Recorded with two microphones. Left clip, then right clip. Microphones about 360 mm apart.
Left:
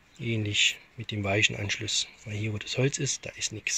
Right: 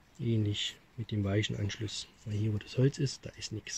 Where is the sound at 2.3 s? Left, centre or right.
Left.